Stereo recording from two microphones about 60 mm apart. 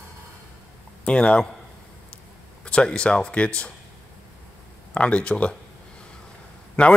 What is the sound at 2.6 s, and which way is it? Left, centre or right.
Speech, centre.